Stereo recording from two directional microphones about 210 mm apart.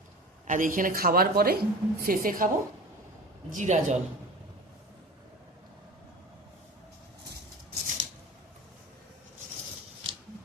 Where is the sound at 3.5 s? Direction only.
35° right (ahead or behind).